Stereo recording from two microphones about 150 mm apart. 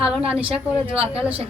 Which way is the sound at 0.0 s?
5° right (ahead or behind).